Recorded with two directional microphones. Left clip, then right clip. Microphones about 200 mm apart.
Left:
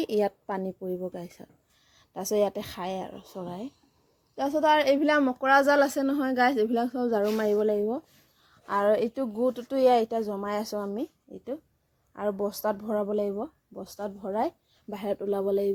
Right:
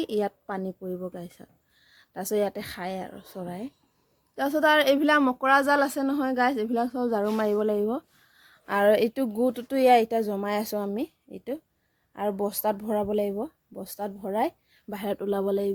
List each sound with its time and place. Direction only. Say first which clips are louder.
0.0 s speech: left 1 dB; centre (ahead or behind)
4.4 s a woman's voice: right 1 dB; 20° right (ahead or behind)